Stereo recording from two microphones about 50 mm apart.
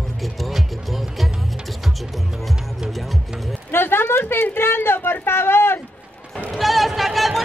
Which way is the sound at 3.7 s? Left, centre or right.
Left.